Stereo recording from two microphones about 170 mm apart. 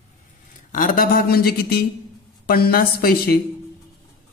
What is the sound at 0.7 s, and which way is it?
Mantra, 50° left (ahead or behind).